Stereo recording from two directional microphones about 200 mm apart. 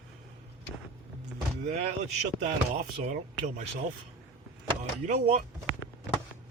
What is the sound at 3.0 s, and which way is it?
Speech, 35° right (ahead or behind).